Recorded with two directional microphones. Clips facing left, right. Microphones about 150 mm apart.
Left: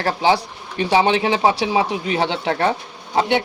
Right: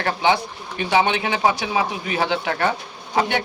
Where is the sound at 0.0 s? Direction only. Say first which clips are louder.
Left 2 dB; 35° left (ahead or behind).